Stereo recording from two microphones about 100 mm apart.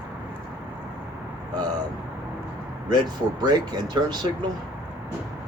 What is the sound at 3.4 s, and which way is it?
Speech, 45° right (ahead or behind).